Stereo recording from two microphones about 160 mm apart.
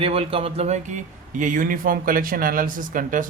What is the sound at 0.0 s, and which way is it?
A man's voice, 35° right (ahead or behind).